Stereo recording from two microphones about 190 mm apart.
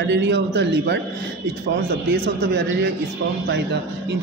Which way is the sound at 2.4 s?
60° right (ahead or behind).